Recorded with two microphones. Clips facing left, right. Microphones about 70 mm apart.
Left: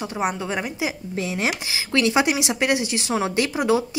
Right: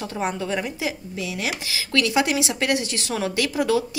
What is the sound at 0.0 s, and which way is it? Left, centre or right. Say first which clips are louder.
Speech: left 1 dB; centre.